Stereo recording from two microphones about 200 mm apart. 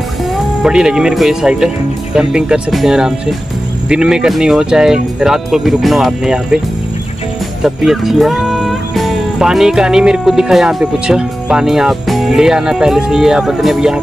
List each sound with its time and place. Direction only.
0.6 s speech: 5° right (ahead or behind)
7.6 s speech: centre (ahead or behind)